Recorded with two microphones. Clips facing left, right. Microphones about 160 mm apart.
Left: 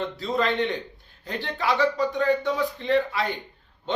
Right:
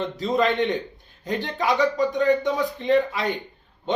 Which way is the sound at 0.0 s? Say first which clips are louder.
Right 3 dB; 20° right (ahead or behind).